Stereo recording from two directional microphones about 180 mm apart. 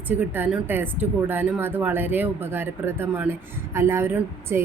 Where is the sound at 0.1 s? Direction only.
10° right (ahead or behind).